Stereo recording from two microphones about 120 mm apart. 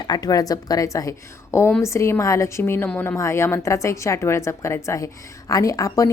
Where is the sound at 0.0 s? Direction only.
35° left (ahead or behind).